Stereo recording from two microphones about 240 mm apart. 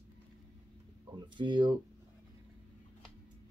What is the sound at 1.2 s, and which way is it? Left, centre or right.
Speech, centre.